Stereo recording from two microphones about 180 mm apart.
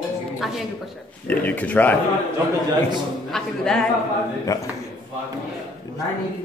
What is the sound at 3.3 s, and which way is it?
Speech, 5° left (ahead or behind).